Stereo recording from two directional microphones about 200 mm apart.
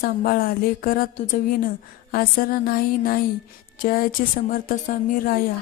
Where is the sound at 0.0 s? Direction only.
45° left (ahead or behind).